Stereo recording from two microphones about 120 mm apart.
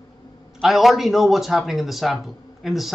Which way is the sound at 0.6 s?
Centre (ahead or behind).